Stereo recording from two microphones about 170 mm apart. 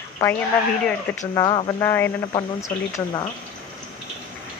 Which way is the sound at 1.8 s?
15° left (ahead or behind).